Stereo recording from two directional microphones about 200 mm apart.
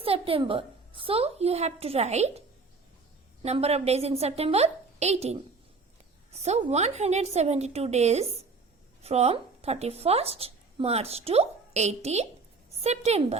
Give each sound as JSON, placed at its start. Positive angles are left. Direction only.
{"t": 0.0, "sound": "a child's voice", "side_deg": -30}
{"t": 3.4, "sound": "a woman's voice", "side_deg": -30}